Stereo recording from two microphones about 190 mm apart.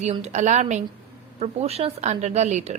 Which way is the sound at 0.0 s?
35° right (ahead or behind).